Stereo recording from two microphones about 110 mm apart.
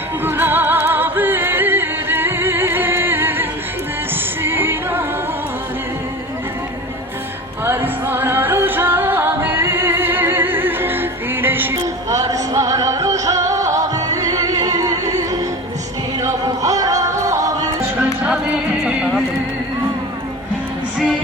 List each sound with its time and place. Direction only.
0.3 s music: 20° right (ahead or behind)
4.4 s music: 20° right (ahead or behind)
7.6 s music: 20° right (ahead or behind)
12.0 s music: 30° right (ahead or behind)